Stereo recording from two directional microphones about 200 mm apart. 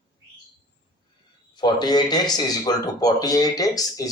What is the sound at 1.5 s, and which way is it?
Speech, 20° left (ahead or behind).